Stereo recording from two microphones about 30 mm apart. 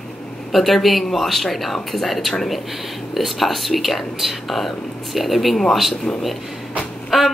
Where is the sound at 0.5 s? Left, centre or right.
Centre.